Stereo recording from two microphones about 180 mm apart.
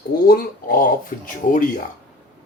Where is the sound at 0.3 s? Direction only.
50° left (ahead or behind).